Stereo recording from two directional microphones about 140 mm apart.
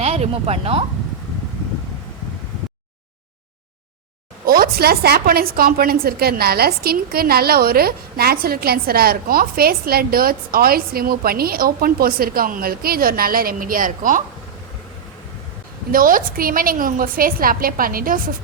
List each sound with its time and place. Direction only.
0.0 s speech: 45° right (ahead or behind)
4.4 s a woman's voice: 90° right; by 14.2 s 75° right (ahead or behind)
15.9 s a woman's voice: 85° right